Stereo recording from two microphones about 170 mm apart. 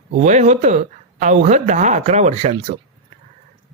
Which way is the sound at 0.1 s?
45° right (ahead or behind).